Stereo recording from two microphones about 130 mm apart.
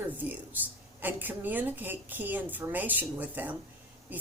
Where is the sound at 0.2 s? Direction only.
15° right (ahead or behind).